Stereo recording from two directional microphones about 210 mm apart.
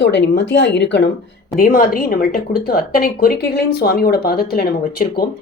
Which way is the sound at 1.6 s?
45° left (ahead or behind).